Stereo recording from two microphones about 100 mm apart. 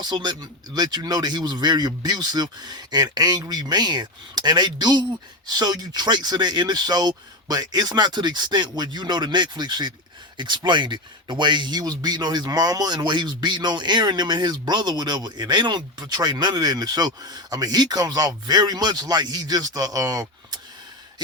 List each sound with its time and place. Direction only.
0.0 s speech: 45° right (ahead or behind)